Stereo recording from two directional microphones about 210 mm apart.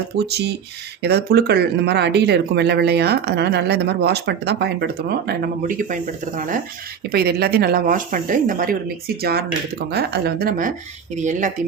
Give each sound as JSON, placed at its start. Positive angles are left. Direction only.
{"t": 0.2, "sound": "speech", "side_deg": -50}